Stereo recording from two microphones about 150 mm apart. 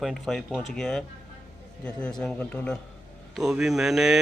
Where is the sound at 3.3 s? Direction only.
5° right (ahead or behind).